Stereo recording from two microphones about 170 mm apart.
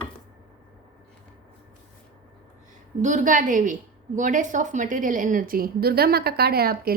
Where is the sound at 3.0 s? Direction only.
45° right (ahead or behind).